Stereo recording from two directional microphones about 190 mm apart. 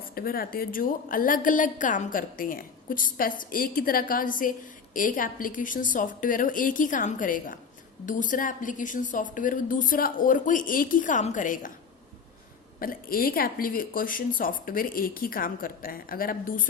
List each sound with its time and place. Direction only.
0.1 s a woman's voice: 50° left (ahead or behind)
12.8 s a woman's voice: 50° left (ahead or behind)